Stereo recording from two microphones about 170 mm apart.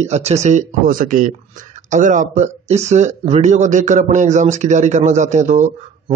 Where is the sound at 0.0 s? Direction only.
40° right (ahead or behind).